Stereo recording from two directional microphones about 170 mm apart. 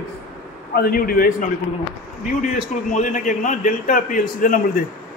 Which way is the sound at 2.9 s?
45° left (ahead or behind).